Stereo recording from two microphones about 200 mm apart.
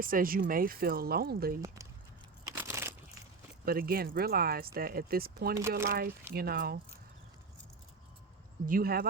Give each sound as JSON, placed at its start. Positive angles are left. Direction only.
{"t": 0.0, "sound": "speech", "side_deg": -45}
{"t": 1.6, "sound": "speech", "side_deg": -15}
{"t": 2.4, "sound": "a sound", "side_deg": -15}
{"t": 3.7, "sound": "speech", "side_deg": -50}
{"t": 8.6, "sound": "speech", "side_deg": -45}